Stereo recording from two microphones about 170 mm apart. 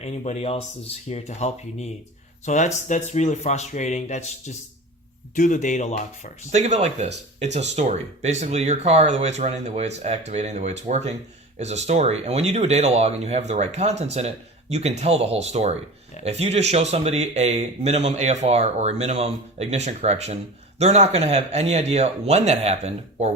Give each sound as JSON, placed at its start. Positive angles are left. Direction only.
{"t": 0.0, "sound": "speech", "side_deg": 40}
{"t": 6.5, "sound": "speech", "side_deg": -40}